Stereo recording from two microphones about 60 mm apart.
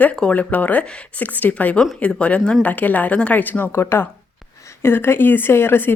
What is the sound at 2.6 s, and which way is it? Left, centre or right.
Speech, left.